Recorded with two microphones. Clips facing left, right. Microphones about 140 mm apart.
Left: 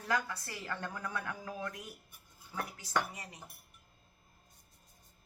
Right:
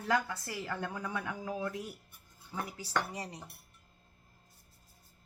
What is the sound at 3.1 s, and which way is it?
Speech, 35° right (ahead or behind).